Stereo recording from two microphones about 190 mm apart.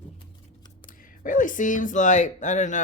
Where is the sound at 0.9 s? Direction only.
45° left (ahead or behind).